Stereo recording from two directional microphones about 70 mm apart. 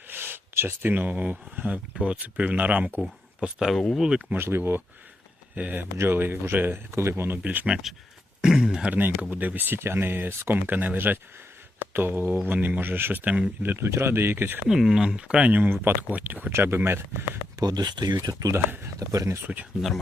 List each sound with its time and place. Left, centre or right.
0.1 s speech: right
3.0 s speech: centre
4.0 s speech: centre
4.4 s speech: right
5.5 s speech: right
7.4 s speech: right
7.7 s speech: centre; by 14.6 s right
14.7 s speech: centre; by 16.5 s right
16.5 s speech: right
17.6 s speech: right
18.5 s speech: right
18.9 s speech: right